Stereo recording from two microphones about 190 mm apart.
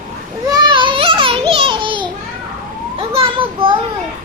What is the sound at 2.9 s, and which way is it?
Speech, 30° right (ahead or behind).